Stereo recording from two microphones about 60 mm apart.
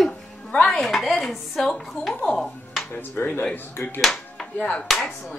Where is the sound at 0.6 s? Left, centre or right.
Centre.